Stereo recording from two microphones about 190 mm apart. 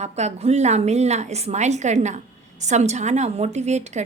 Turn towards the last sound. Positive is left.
turn(degrees=-35)  # may be behind; listen again after turning